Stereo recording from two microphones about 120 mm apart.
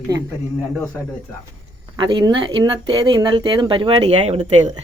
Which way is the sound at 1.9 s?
40° right (ahead or behind).